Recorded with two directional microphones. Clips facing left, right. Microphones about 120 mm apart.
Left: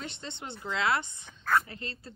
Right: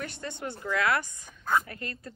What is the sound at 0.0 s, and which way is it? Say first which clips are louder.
Speech: right 4 dB; 25° left (ahead or behind).